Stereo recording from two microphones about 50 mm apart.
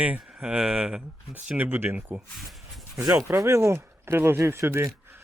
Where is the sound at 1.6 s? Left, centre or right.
Right.